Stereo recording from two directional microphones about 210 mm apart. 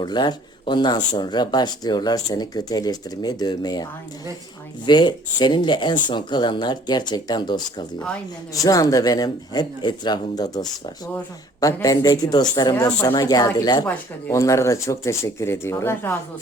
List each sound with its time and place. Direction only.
0.0 s speech: 20° left (ahead or behind)
4.9 s speech: 20° left (ahead or behind)
11.6 s speech: 15° left (ahead or behind)